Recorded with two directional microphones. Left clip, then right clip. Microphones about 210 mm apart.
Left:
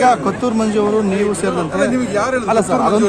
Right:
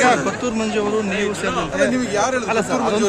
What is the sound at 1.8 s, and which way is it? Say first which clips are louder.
Speech: left 1 dB; 5° right (ahead or behind).